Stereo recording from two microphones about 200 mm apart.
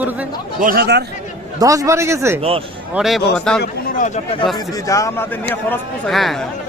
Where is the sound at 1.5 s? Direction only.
15° right (ahead or behind).